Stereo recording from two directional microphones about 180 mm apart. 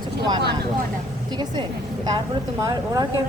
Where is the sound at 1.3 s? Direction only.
25° right (ahead or behind).